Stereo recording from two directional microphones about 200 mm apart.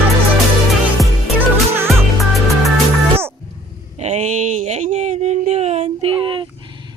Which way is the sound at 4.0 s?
35° right (ahead or behind).